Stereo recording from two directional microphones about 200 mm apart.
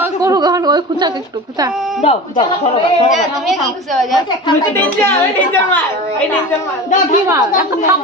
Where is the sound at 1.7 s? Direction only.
Centre (ahead or behind).